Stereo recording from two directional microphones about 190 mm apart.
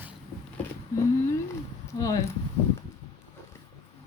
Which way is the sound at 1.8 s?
15° left (ahead or behind).